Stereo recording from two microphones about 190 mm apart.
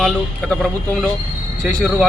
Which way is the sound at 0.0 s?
5° left (ahead or behind).